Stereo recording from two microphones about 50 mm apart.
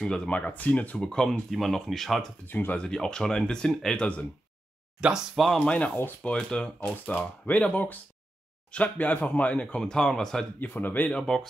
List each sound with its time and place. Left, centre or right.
0.0 s speech: centre
0.3 s speech: left
0.9 s speech: centre
1.5 s speech: centre
2.4 s speech: left
2.8 s speech: centre
5.0 s speech: centre
5.6 s speech: left
7.1 s speech: left
9.8 s speech: centre
10.6 s speech: left
11.1 s speech: centre